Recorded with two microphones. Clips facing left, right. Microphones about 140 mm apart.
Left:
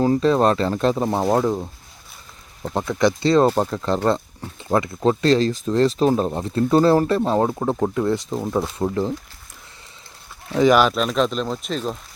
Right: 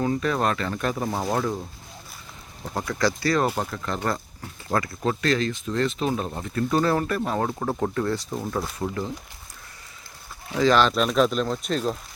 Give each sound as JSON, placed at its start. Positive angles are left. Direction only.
{"t": 0.0, "sound": "speech", "side_deg": 30}
{"t": 2.7, "sound": "speech", "side_deg": 20}
{"t": 10.5, "sound": "speech", "side_deg": 15}